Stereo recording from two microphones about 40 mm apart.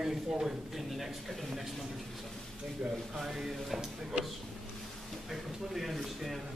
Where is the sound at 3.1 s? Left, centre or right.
Centre.